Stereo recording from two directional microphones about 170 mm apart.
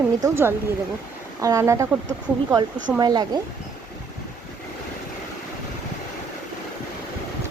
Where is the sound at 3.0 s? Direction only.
25° right (ahead or behind).